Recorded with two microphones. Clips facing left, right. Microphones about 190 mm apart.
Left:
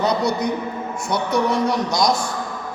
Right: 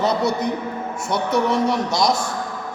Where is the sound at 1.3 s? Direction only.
25° right (ahead or behind).